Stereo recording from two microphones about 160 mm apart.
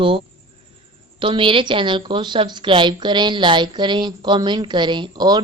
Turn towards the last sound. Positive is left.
turn(degrees=-25)  # may be behind; listen again after turning